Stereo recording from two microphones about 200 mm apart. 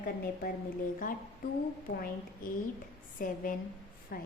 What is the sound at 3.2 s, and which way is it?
Speech, 45° left (ahead or behind).